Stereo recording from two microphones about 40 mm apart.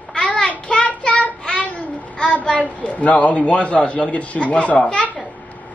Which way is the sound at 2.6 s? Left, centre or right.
Left.